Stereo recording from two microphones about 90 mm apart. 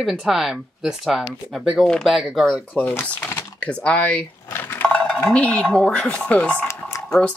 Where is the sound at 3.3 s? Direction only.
30° left (ahead or behind).